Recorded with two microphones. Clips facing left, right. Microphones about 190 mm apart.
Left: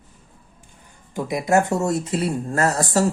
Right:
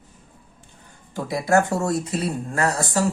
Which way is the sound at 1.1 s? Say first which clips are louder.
Left 1 dB; 20° left (ahead or behind).